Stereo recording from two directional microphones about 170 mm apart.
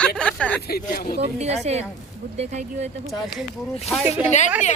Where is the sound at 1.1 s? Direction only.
40° right (ahead or behind).